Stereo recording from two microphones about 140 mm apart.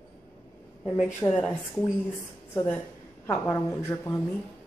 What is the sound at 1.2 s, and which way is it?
A woman's voice, 10° left (ahead or behind).